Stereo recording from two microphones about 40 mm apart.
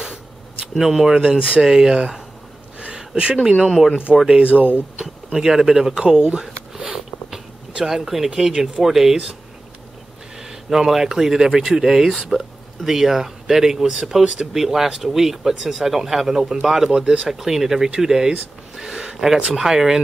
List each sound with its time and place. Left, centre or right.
0.7 s speech: centre
2.8 s a sound: right
3.6 s speech: centre
6.1 s a sound: centre
8.8 s speech: centre
10.3 s speech: centre
12.1 s speech: centre
12.4 s speech: centre